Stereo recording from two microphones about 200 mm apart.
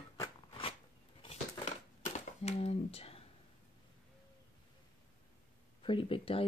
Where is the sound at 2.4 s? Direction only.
30° left (ahead or behind).